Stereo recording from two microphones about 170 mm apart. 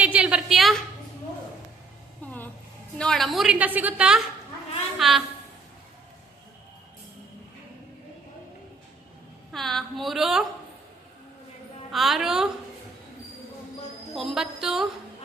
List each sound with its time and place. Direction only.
0.0 s a sound: 5° right (ahead or behind)
2.2 s a sound: 10° left (ahead or behind)
3.0 s a woman's voice: centre (ahead or behind)
9.5 s a woman's voice: centre (ahead or behind)
11.9 s a woman's voice: centre (ahead or behind)
14.1 s a woman's voice: centre (ahead or behind)